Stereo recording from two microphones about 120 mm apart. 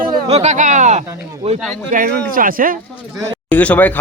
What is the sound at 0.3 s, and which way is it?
Speech, 65° right (ahead or behind).